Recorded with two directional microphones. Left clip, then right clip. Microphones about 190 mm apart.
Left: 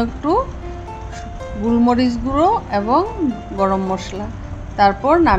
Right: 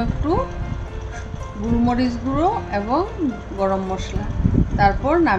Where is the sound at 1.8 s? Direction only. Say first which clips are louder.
Left 4 dB; 25° left (ahead or behind).